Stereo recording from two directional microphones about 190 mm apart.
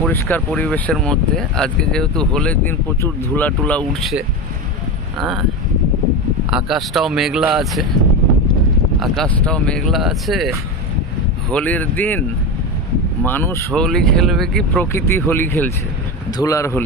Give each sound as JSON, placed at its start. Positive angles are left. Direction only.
{"t": 0.0, "sound": "speech", "side_deg": 10}
{"t": 6.5, "sound": "speech", "side_deg": 0}
{"t": 9.0, "sound": "speech", "side_deg": 0}
{"t": 11.5, "sound": "speech", "side_deg": 10}
{"t": 13.7, "sound": "speech", "side_deg": 5}